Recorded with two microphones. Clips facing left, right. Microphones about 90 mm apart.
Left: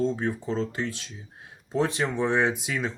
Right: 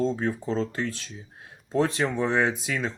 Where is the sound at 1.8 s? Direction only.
20° left (ahead or behind).